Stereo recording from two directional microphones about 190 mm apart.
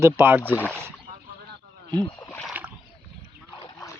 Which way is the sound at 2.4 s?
10° right (ahead or behind).